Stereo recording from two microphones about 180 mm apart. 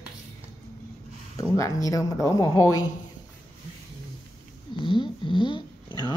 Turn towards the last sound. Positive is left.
turn(degrees=25)  # may be behind; listen again after turning